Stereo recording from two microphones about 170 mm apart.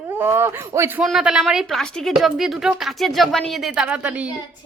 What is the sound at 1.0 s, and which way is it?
A woman's voice, 5° right (ahead or behind).